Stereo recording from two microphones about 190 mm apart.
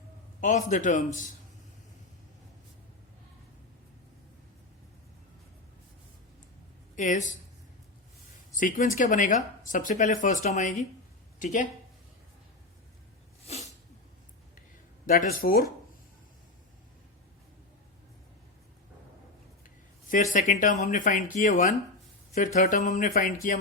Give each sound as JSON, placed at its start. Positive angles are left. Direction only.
{"t": 0.4, "sound": "speech", "side_deg": 40}
{"t": 6.9, "sound": "speech", "side_deg": 40}
{"t": 8.5, "sound": "speech", "side_deg": 45}
{"t": 13.4, "sound": "sneeze", "side_deg": 35}
{"t": 15.0, "sound": "speech", "side_deg": 45}
{"t": 19.6, "sound": "speech", "side_deg": 45}